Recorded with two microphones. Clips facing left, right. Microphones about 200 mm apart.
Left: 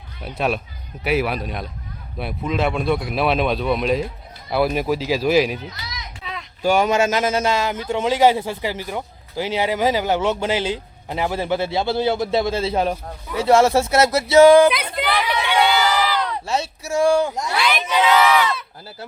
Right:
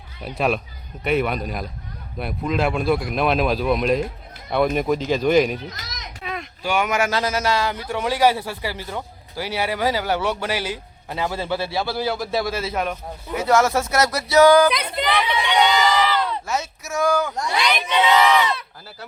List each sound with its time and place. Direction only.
0.2 s speech: centre (ahead or behind)
5.7 s children playing: 45° right (ahead or behind)
6.6 s a man's voice: 40° left (ahead or behind)
14.7 s a sound: 5° left (ahead or behind)
16.5 s a man's voice: 30° left (ahead or behind)
17.7 s speech: 5° left (ahead or behind)